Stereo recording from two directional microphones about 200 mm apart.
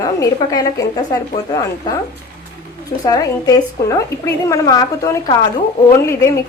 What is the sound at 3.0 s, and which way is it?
A woman's voice, 15° left (ahead or behind).